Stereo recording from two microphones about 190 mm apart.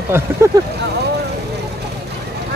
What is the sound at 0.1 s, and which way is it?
Speech, 15° right (ahead or behind).